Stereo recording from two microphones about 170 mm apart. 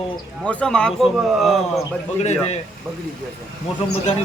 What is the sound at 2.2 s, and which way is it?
Speech, 40° left (ahead or behind).